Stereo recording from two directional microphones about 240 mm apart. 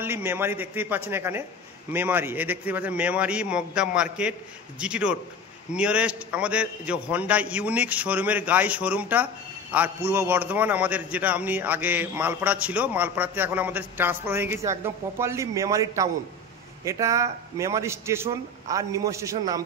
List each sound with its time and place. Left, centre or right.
0.0 s a man's voice: centre